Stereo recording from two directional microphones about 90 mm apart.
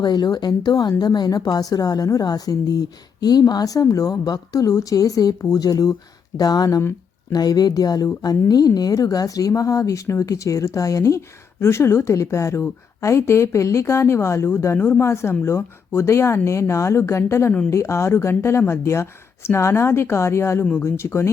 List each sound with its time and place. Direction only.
0.0 s a woman's voice: 50° left (ahead or behind); by 21.2 s 30° left (ahead or behind)